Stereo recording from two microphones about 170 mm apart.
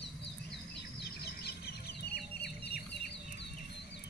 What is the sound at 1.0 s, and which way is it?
Chicken, 65° left (ahead or behind).